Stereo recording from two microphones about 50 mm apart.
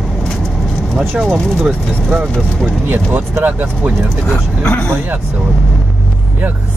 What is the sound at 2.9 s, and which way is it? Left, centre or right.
Speech, right.